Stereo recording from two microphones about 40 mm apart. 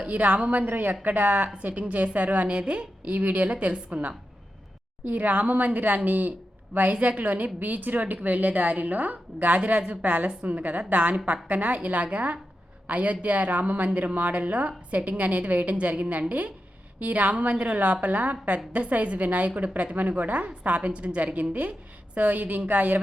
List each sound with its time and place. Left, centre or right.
0.0 s a woman's voice: right
0.7 s a woman's voice: right
6.9 s a woman's voice: right